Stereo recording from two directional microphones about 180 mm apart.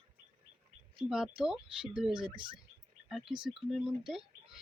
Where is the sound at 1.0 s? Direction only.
5° right (ahead or behind).